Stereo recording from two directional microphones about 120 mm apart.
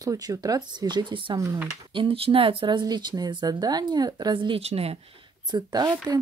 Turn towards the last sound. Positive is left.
turn(degrees=-35)  # may be behind; listen again after turning